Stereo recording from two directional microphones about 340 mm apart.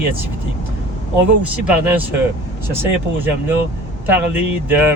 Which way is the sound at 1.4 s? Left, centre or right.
Centre.